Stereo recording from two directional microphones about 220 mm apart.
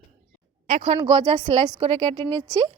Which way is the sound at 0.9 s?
20° right (ahead or behind).